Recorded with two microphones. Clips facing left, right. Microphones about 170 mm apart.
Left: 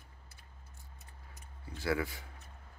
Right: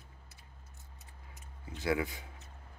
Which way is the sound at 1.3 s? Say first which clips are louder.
Right 1 dB; 20° right (ahead or behind).